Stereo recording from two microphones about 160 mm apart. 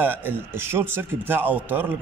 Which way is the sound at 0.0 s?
10° right (ahead or behind).